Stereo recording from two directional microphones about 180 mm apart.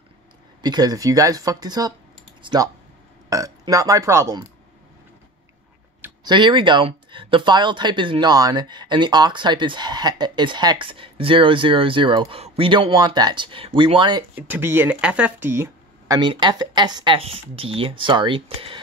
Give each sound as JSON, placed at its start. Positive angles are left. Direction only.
{"t": 0.6, "sound": "speech", "side_deg": -20}
{"t": 6.2, "sound": "speech", "side_deg": -25}
{"t": 14.3, "sound": "speech", "side_deg": -10}